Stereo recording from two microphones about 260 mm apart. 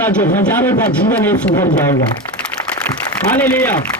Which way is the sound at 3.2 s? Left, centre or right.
Centre.